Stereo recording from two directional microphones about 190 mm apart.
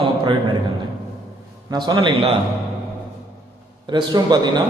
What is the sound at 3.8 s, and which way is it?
Speech, 20° right (ahead or behind).